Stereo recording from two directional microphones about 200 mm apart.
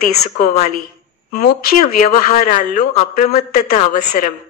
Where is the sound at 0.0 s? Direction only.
45° left (ahead or behind).